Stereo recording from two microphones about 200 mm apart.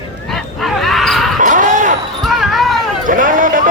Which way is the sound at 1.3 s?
40° right (ahead or behind).